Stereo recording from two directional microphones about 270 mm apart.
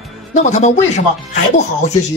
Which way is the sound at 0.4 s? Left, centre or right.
Left.